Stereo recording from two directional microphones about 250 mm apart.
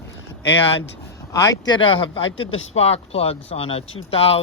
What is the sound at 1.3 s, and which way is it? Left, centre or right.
Speech, centre.